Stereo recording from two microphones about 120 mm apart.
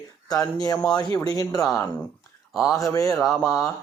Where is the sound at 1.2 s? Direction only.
30° left (ahead or behind).